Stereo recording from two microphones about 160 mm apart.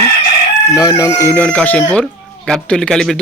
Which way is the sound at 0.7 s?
25° left (ahead or behind).